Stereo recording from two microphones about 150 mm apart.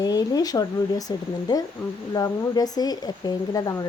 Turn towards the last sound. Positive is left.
turn(degrees=25)  # may be behind; listen again after turning